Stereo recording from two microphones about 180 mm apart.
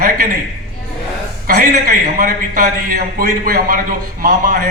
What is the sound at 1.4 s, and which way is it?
A man's voice, 55° right (ahead or behind).